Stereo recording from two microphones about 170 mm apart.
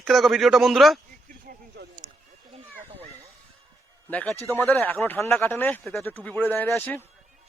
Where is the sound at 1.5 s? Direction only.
70° right (ahead or behind).